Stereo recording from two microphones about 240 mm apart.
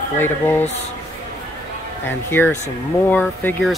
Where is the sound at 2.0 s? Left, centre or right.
Centre.